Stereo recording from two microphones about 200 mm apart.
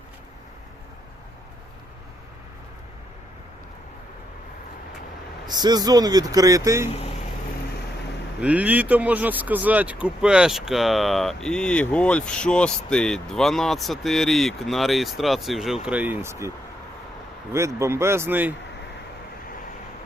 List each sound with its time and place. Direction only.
5.5 s speech: 20° right (ahead or behind)
8.4 s speech: 5° right (ahead or behind)
17.5 s speech: 15° right (ahead or behind)